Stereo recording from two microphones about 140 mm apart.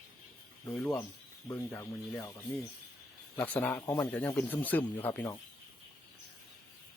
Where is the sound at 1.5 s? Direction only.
15° left (ahead or behind).